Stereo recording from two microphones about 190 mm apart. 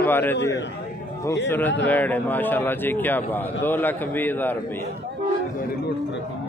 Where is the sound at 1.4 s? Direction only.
10° left (ahead or behind).